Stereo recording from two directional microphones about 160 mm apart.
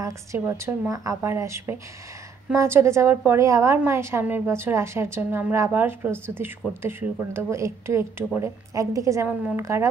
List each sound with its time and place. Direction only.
0.0 s a woman's voice: 15° right (ahead or behind)